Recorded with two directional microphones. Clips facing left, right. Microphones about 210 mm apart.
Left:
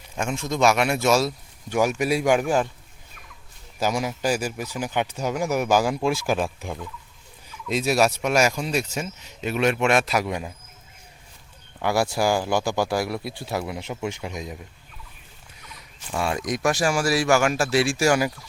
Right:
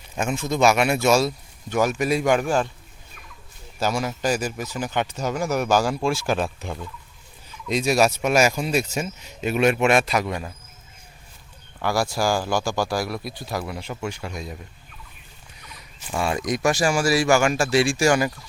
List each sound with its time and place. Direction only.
0.2 s speech: 5° right (ahead or behind)
1.7 s speech: 10° left (ahead or behind)
3.8 s speech: 15° left (ahead or behind)
10.2 s speech: 10° left (ahead or behind)
11.8 s speech: 20° left (ahead or behind)
15.7 s a sound: centre (ahead or behind)
16.5 s speech: centre (ahead or behind)